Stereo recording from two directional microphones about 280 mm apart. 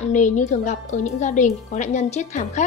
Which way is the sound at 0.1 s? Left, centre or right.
Left.